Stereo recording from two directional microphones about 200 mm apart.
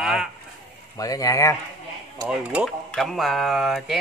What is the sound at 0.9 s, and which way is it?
Speech, 15° left (ahead or behind).